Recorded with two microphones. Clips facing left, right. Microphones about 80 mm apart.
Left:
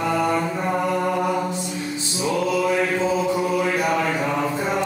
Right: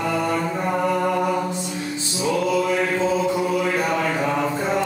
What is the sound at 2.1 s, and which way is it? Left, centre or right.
Music, centre.